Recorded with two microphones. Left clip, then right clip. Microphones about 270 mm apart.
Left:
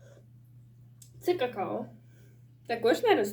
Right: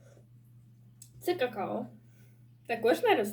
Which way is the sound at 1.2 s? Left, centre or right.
Centre.